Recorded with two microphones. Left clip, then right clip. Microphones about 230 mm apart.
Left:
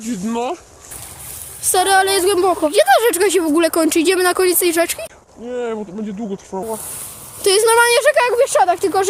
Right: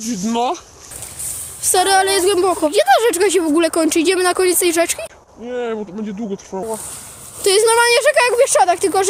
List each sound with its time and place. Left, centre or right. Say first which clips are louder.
0.3 s speech: right 4 dB; right
1.6 s a woman's voice: even; centre
5.5 s speech: even; centre
7.4 s a woman's voice: even; centre